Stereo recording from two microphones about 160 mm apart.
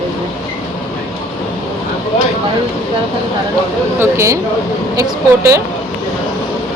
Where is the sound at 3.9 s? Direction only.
15° right (ahead or behind).